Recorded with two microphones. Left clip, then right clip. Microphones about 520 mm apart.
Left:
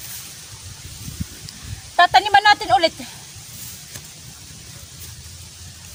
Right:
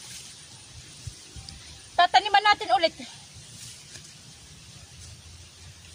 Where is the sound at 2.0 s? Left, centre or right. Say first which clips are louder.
Left 6 dB; right.